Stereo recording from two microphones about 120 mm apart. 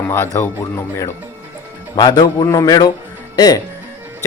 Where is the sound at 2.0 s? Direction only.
35° left (ahead or behind).